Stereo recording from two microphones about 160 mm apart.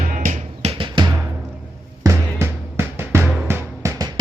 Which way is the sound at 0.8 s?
30° right (ahead or behind).